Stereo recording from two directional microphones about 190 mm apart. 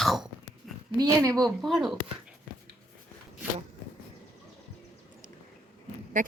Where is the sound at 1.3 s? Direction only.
Centre (ahead or behind).